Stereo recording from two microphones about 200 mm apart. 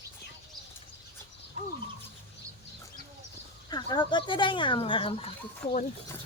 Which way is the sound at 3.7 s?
20° left (ahead or behind).